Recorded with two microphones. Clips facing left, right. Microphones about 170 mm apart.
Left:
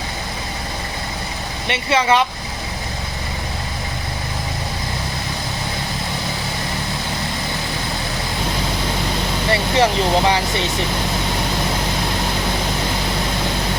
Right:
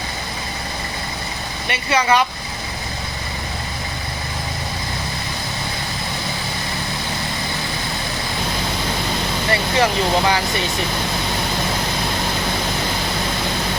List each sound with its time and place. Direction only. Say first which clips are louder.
1.6 s speech: left 1 dB; 25° left (ahead or behind)
9.5 s speech: left 2 dB; 25° left (ahead or behind)